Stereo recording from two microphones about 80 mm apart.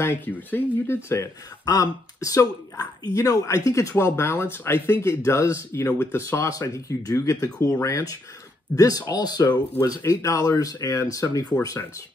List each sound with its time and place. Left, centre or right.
0.0 s speech: left
9.8 s speech: left